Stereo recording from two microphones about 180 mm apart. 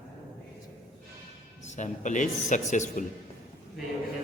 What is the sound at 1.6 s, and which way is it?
A man's voice, 40° left (ahead or behind).